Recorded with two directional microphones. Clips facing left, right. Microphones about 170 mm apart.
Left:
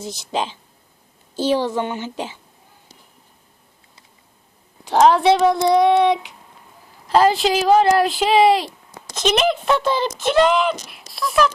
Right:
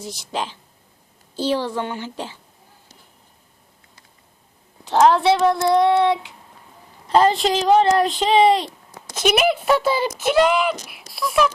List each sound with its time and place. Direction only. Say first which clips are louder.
0.0 s speech: left 3 dB; 20° left (ahead or behind)
4.9 s speech: left 1 dB; 15° left (ahead or behind)
7.1 s a woman's voice: left 1 dB; 5° left (ahead or behind)
9.1 s speech: even; 10° right (ahead or behind)